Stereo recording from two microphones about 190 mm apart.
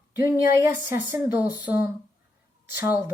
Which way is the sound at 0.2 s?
15° right (ahead or behind).